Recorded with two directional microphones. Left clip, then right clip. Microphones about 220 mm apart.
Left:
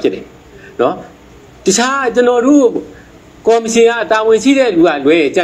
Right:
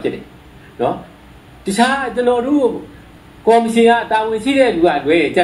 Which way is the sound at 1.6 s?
40° left (ahead or behind).